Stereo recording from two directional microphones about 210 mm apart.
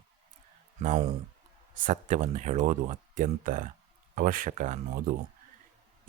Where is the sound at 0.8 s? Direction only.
30° right (ahead or behind).